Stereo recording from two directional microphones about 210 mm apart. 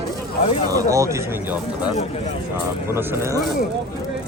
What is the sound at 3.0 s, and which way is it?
Speech, 10° right (ahead or behind).